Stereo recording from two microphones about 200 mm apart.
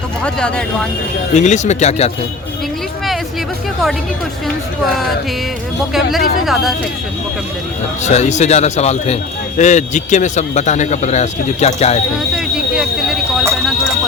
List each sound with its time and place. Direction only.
0.3 s speech: 5° left (ahead or behind)
1.3 s a man's voice: 35° left (ahead or behind)
5.9 s speech: centre (ahead or behind)
8.0 s a man's voice: 35° left (ahead or behind)
12.3 s a sound: 5° right (ahead or behind)